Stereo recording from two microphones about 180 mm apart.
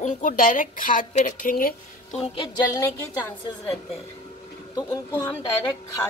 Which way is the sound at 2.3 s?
25° left (ahead or behind).